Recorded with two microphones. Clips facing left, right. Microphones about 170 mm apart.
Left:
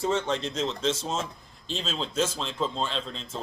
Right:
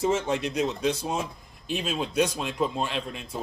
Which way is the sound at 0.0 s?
15° right (ahead or behind).